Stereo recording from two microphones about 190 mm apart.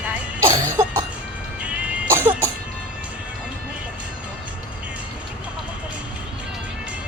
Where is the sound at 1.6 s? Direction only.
10° right (ahead or behind).